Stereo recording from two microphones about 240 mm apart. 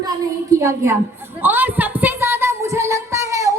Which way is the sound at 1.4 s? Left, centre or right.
Centre.